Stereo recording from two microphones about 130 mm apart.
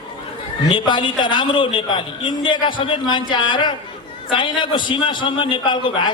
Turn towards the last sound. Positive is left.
turn(degrees=35)  # may be behind; listen again after turning